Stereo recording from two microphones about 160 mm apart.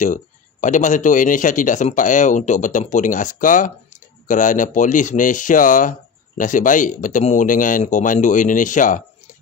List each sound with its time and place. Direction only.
0.0 s speech: 50° left (ahead or behind)